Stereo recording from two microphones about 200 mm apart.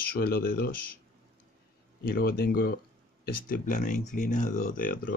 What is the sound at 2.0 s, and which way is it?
Speech, 45° left (ahead or behind).